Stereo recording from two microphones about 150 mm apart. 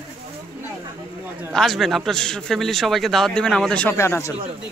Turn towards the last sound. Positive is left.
turn(degrees=20)  # may be behind; listen again after turning